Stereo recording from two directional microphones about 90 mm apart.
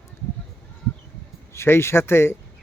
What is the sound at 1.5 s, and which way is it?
Speech, 25° left (ahead or behind).